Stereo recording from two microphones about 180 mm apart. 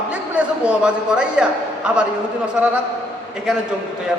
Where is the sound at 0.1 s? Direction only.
5° right (ahead or behind).